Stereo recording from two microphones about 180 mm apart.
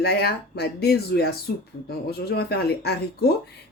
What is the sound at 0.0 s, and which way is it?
Speech, 60° left (ahead or behind).